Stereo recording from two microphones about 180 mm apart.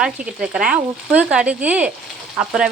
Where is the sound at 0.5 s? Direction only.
5° right (ahead or behind).